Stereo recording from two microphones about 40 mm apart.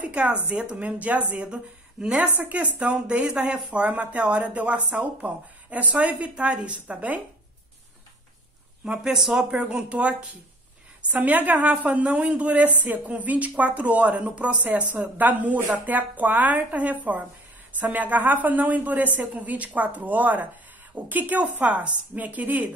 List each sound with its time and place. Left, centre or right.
0.0 s speech: right
2.5 s speech: right
3.3 s speech: right
8.8 s speech: right
9.5 s speech: right
11.2 s speech: right